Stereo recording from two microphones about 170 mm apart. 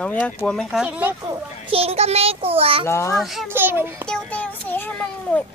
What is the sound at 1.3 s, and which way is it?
A child's voice, 35° right (ahead or behind).